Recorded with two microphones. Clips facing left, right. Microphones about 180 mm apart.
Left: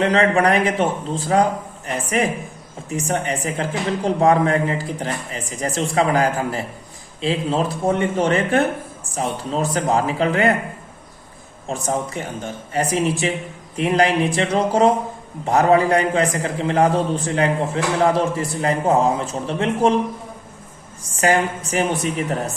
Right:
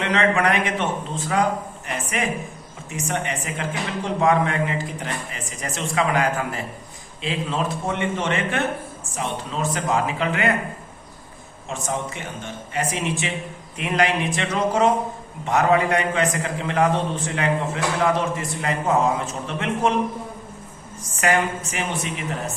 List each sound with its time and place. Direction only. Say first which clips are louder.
0.0 s a man's voice: left 4 dB; 35° left (ahead or behind)
11.7 s a man's voice: left 4 dB; 40° left (ahead or behind)
21.2 s a man's voice: left 3 dB; 35° left (ahead or behind)